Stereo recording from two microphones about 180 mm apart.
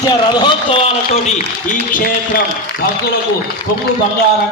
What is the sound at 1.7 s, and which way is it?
Speech, 50° left (ahead or behind).